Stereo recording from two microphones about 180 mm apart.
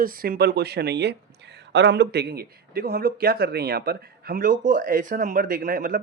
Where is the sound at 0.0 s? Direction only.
55° right (ahead or behind).